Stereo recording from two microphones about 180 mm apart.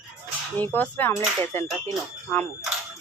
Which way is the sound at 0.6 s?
10° left (ahead or behind).